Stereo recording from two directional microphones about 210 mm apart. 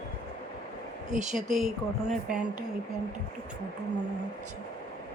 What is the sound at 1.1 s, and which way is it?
Speech, 35° right (ahead or behind).